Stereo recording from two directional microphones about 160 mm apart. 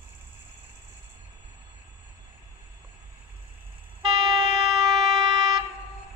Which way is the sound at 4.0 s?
25° right (ahead or behind).